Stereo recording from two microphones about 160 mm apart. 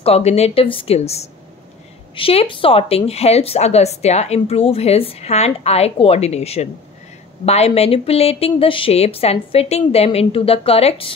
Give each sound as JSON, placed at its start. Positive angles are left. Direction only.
{"t": 0.0, "sound": "a woman's voice", "side_deg": 40}